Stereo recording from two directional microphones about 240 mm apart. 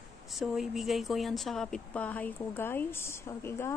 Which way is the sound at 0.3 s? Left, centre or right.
Centre.